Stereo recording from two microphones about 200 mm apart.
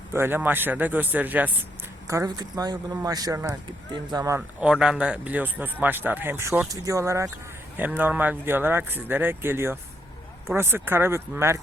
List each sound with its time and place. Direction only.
0.1 s speech: 10° right (ahead or behind)
4.6 s speech: 5° right (ahead or behind)